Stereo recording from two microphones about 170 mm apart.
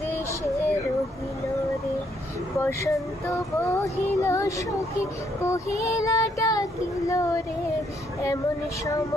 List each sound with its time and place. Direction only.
2.5 s child singing: 15° left (ahead or behind)